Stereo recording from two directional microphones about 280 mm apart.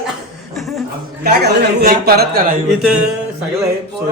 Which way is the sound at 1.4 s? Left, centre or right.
Right.